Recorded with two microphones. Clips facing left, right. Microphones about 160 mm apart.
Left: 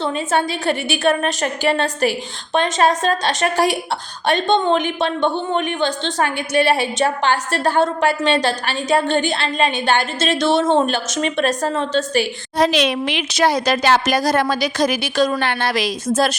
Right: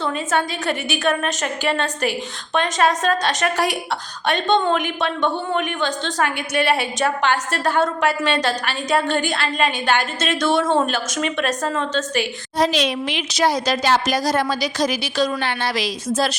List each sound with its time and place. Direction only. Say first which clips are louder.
0.0 s a woman's voice: left 2 dB; 30° left (ahead or behind)
12.5 s a woman's voice: left 3 dB; 65° left (ahead or behind)